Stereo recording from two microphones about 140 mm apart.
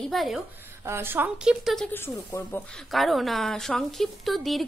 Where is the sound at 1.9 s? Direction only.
15° left (ahead or behind).